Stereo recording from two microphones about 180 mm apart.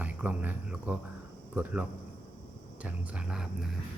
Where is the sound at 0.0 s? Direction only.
10° right (ahead or behind).